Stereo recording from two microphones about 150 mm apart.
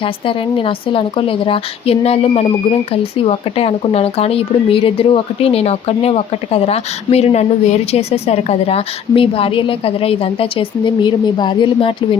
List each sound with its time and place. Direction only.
0.0 s speech: 35° left (ahead or behind)